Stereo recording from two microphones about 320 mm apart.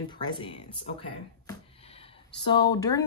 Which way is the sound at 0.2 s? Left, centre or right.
Centre.